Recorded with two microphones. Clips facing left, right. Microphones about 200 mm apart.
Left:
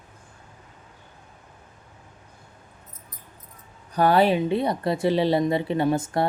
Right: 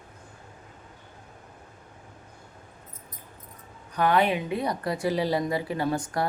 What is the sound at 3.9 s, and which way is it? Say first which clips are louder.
A woman's voice: left 4 dB; 35° left (ahead or behind).